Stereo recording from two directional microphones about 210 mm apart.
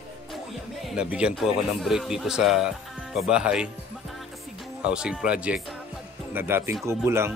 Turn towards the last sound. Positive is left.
turn(degrees=-10)  # may be behind; listen again after turning